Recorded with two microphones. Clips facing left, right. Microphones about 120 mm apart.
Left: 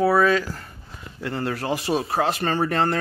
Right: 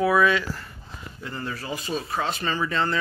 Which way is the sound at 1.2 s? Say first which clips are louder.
Left 7 dB; 80° left.